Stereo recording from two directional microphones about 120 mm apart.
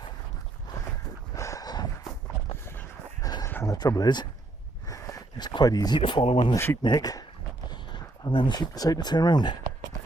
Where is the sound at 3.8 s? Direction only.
35° left (ahead or behind).